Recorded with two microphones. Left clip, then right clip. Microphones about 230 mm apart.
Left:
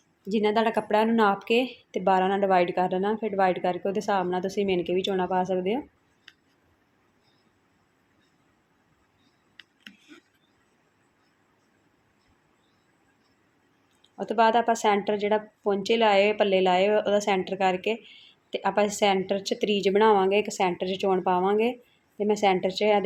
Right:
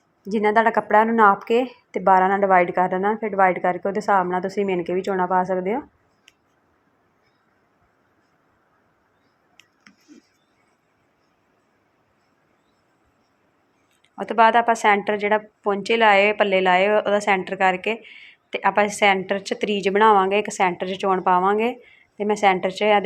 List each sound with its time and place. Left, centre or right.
0.4 s a woman's voice: centre
1.5 s speech: right
2.0 s a woman's voice: centre
4.5 s speech: right
5.0 s a woman's voice: centre
14.2 s a woman's voice: centre